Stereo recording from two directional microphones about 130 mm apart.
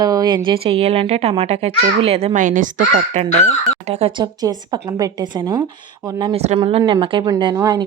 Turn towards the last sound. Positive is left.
turn(degrees=-30)  # may be behind; listen again after turning